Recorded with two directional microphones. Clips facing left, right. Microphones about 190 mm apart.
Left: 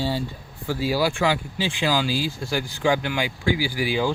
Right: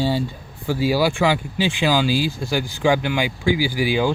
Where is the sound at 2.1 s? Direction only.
80° right.